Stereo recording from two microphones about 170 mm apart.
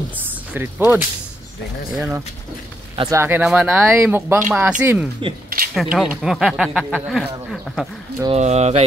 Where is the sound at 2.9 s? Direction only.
20° right (ahead or behind).